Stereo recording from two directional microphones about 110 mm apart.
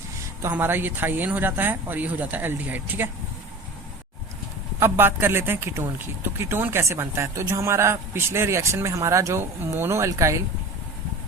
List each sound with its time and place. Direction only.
0.4 s speech: 20° right (ahead or behind)
4.8 s a man's voice: 20° right (ahead or behind)